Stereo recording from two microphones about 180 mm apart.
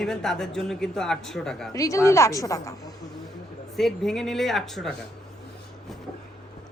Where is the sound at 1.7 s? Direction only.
20° left (ahead or behind).